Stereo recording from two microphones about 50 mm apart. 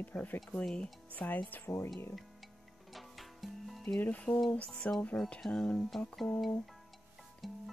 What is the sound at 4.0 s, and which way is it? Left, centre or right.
Speech, left.